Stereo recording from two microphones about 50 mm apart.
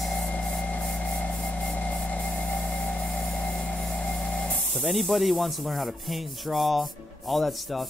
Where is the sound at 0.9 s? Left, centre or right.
Left.